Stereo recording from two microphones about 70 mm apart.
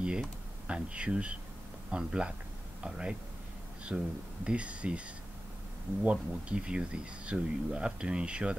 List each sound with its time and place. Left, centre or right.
0.0 s speech: centre
4.5 s speech: centre
6.0 s speech: centre